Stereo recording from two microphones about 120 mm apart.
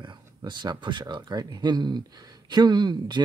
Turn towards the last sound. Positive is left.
turn(degrees=-40)  # may be behind; listen again after turning